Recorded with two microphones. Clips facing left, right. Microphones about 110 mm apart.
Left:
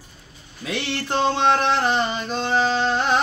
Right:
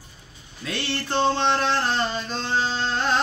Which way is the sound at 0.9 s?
10° left (ahead or behind).